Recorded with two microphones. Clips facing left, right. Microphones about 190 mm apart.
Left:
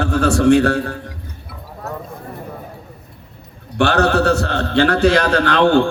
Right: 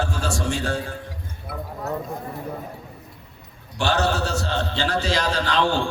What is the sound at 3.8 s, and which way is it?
A man's voice, 60° left (ahead or behind).